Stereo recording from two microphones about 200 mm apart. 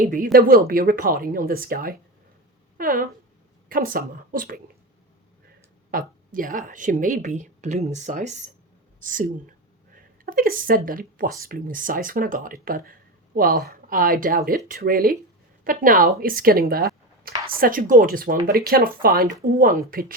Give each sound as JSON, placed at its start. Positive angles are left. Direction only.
{"t": 0.0, "sound": "speech", "side_deg": -45}
{"t": 5.9, "sound": "a woman's voice", "side_deg": -45}